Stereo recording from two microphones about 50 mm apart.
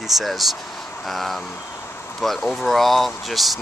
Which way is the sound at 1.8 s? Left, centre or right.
Left.